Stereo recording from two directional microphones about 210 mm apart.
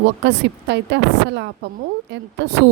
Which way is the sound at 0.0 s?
55° right (ahead or behind).